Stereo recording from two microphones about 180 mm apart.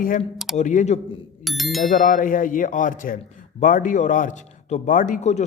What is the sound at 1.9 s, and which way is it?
A man's voice, 50° left (ahead or behind).